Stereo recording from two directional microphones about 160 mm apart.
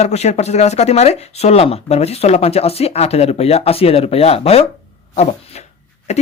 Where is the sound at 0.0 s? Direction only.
45° left (ahead or behind).